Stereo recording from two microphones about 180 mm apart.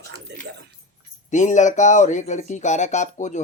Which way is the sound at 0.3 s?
70° right (ahead or behind).